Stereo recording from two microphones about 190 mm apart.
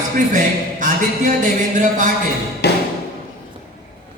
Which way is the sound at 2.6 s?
60° left (ahead or behind).